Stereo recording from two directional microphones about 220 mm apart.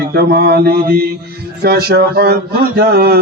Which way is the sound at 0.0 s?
45° right (ahead or behind).